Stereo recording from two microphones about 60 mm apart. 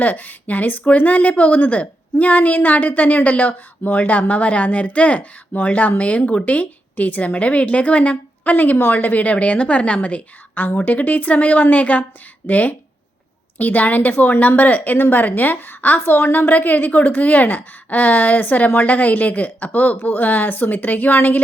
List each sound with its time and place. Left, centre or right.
0.0 s a woman's voice: left